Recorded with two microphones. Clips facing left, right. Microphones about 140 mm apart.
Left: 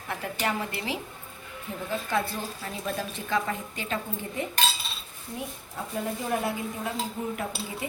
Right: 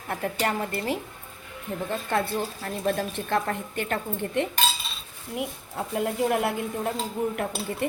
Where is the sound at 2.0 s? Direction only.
55° right (ahead or behind).